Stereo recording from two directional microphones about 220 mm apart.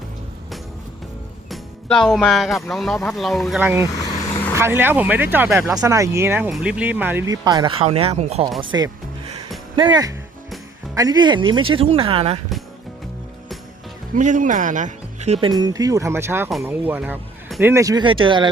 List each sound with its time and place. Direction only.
1.5 s speech: centre (ahead or behind)
3.9 s vehicle: 15° left (ahead or behind)
4.5 s speech: 10° right (ahead or behind); by 12.4 s 25° right (ahead or behind)
14.2 s speech: 35° right (ahead or behind)